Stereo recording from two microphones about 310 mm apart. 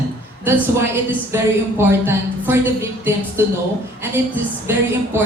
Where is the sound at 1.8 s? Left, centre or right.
Centre.